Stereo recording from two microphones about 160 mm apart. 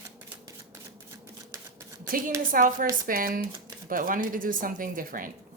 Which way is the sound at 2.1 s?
60° right (ahead or behind).